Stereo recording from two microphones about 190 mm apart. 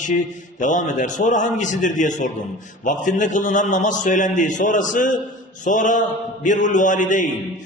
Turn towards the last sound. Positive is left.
turn(degrees=45)  # may be behind; listen again after turning